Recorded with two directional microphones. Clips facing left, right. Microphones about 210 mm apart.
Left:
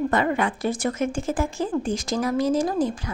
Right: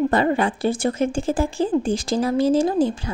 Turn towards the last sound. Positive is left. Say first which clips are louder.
# right 4 dB
turn(degrees=-30)  # may be behind; listen again after turning